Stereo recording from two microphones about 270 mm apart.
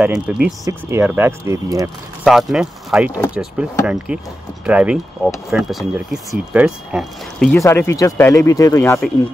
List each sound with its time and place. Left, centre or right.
0.0 s speech: centre
2.2 s speech: centre